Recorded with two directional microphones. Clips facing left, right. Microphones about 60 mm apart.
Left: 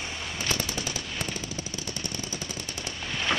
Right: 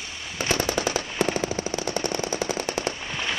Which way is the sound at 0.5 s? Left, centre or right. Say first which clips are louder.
Right 8 dB; right.